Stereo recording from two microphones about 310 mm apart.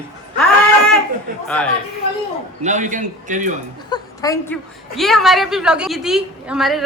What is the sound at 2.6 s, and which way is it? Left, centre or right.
Speech, right.